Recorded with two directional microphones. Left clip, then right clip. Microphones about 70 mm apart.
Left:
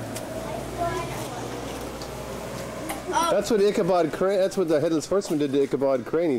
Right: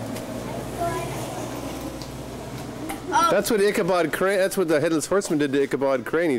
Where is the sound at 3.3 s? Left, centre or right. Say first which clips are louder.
Right 1 dB; right.